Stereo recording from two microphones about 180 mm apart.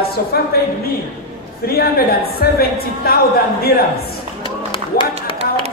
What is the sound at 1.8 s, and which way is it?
A woman's voice, 60° left (ahead or behind).